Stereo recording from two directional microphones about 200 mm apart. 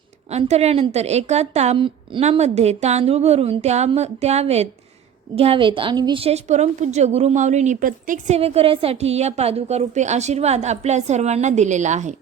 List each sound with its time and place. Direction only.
0.3 s a woman's voice: 35° right (ahead or behind)
8.4 s a woman's voice: 30° right (ahead or behind)